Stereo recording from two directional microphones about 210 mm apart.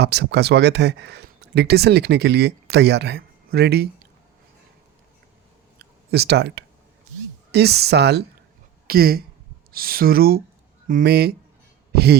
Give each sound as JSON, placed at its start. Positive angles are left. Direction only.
{"t": 0.0, "sound": "speech", "side_deg": -50}
{"t": 5.8, "sound": "speech", "side_deg": -50}
{"t": 11.9, "sound": "a sound", "side_deg": -50}